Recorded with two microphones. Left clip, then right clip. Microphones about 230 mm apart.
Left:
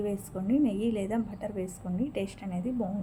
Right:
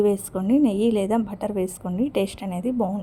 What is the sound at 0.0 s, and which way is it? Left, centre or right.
A woman's voice, right.